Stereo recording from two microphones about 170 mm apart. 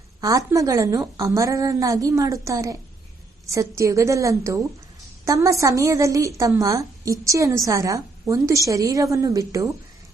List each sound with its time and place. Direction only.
0.2 s a woman's voice: 20° right (ahead or behind)